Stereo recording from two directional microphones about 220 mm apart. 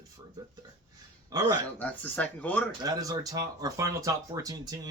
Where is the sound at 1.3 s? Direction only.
15° right (ahead or behind).